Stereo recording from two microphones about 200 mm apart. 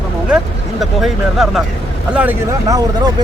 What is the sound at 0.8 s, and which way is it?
Speech, centre (ahead or behind).